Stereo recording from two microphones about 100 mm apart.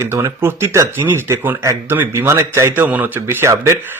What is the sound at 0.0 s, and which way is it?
Speech, 30° right (ahead or behind).